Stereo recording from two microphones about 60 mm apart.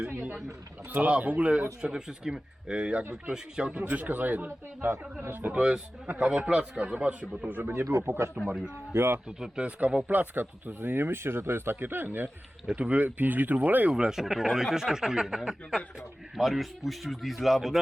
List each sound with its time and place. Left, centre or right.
0.1 s a sound: right
0.9 s speech: right
1.8 s speech: centre
3.9 s speech: right
5.5 s speech: centre
7.7 s speech: right
9.6 s speech: right
12.6 s speech: right
13.9 s speech: centre